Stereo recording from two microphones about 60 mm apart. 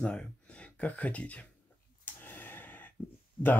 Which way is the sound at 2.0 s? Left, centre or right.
Left.